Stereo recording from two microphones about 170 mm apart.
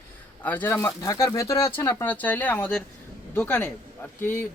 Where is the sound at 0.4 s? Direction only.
10° left (ahead or behind).